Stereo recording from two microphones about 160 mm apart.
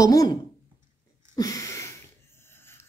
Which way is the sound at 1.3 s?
20° left (ahead or behind).